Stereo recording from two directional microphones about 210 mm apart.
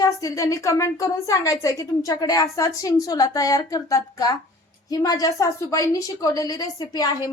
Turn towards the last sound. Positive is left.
turn(degrees=20)  # may be behind; listen again after turning